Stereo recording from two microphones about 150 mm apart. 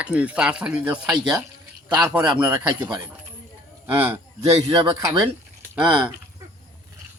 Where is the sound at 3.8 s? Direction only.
15° right (ahead or behind).